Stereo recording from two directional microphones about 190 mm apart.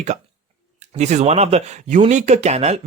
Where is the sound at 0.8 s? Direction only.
35° right (ahead or behind).